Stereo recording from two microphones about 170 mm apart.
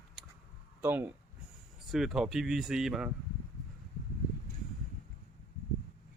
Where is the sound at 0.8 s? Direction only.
10° right (ahead or behind).